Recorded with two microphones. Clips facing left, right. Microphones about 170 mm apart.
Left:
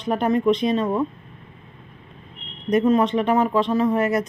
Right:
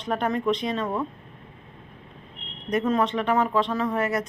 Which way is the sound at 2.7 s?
15° left (ahead or behind).